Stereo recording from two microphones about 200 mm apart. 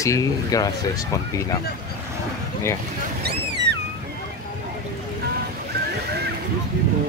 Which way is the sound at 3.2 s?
55° right (ahead or behind).